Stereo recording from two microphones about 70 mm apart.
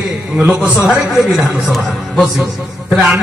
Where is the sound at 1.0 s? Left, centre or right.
Centre.